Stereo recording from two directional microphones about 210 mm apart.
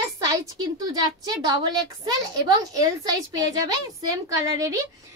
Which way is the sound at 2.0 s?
20° right (ahead or behind).